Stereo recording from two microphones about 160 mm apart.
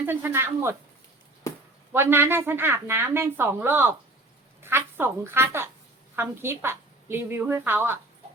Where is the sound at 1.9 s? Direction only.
15° right (ahead or behind).